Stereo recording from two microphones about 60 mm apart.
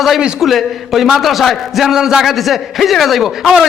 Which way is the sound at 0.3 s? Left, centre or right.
Centre.